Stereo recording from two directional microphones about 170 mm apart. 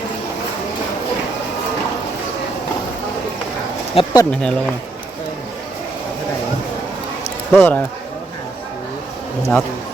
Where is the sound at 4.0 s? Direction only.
35° left (ahead or behind).